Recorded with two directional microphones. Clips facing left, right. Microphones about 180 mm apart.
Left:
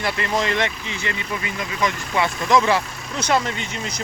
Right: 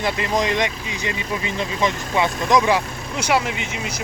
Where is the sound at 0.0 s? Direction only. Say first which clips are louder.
Right 2 dB; 15° right (ahead or behind).